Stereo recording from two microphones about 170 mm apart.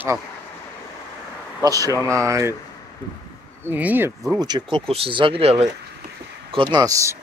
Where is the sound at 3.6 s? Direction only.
10° right (ahead or behind).